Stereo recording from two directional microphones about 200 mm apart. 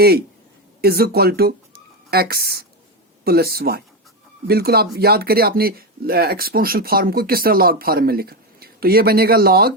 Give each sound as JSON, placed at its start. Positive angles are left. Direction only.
{"t": 0.8, "sound": "speech", "side_deg": -50}